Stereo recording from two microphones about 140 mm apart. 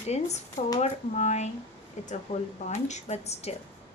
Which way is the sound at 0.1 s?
50° left (ahead or behind).